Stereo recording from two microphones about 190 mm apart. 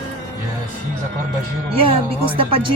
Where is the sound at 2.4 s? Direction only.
25° right (ahead or behind).